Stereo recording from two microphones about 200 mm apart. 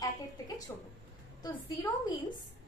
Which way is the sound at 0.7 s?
15° left (ahead or behind).